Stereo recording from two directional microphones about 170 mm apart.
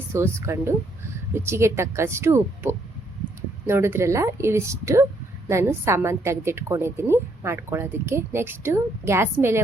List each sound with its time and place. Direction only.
0.1 s a woman's voice: 15° right (ahead or behind)